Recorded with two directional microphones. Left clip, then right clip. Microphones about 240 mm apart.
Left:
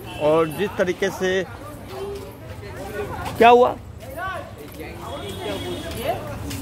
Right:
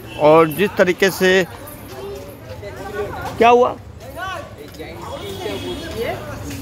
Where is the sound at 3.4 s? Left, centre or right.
Centre.